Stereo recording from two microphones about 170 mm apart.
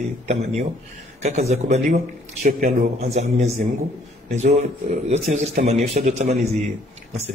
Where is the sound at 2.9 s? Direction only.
40° right (ahead or behind).